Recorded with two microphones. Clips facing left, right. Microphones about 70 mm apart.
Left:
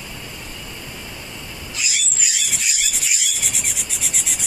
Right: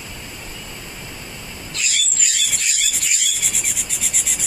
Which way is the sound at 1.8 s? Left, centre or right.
Centre.